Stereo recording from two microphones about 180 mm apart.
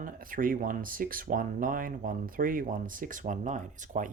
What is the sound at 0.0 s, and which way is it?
Speech, 50° right (ahead or behind).